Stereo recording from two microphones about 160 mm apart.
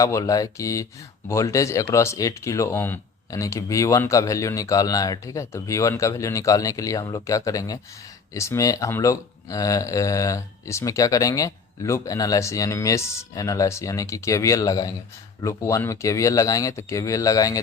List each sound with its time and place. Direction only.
0.0 s speech: 20° left (ahead or behind)